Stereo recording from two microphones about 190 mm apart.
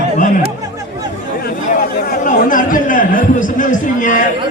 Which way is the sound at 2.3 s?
45° left (ahead or behind).